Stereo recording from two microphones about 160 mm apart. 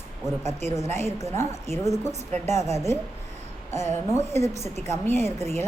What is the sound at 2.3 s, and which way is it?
Speech, 45° right (ahead or behind).